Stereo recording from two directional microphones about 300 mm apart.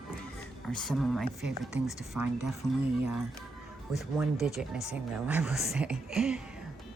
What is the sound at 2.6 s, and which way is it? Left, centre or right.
Speech, centre.